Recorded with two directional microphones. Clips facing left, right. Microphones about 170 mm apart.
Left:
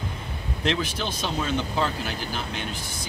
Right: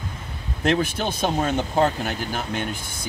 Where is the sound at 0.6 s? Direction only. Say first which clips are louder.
Right 5 dB; 50° right (ahead or behind).